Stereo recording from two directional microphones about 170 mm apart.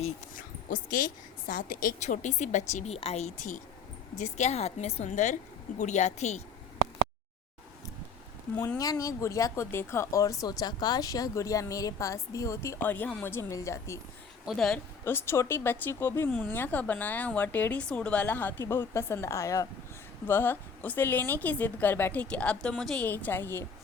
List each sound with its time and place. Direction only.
0.3 s a woman's voice: 50° left (ahead or behind)
8.8 s a woman's voice: 20° left (ahead or behind)
14.4 s a woman's voice: centre (ahead or behind)
15.0 s speech: 15° left (ahead or behind)